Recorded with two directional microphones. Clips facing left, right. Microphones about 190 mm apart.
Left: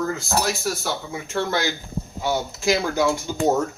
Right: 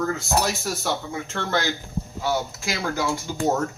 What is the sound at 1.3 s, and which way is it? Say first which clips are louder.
Speech: left 3 dB; 10° left (ahead or behind).